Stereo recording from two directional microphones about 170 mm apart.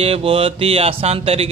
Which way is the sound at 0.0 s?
35° right (ahead or behind).